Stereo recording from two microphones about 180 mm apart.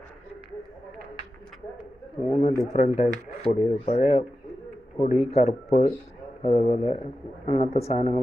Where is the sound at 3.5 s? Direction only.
30° left (ahead or behind).